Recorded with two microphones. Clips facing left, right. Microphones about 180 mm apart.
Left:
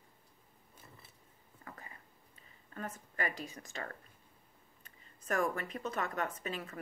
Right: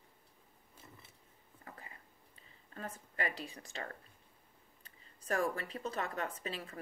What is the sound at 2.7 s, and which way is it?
A woman's voice, 35° right (ahead or behind).